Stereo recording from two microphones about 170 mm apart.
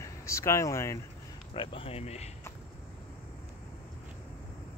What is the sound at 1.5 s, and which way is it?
Speech, 30° left (ahead or behind).